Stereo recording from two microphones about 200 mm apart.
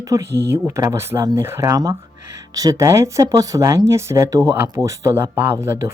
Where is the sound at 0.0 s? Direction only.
15° right (ahead or behind).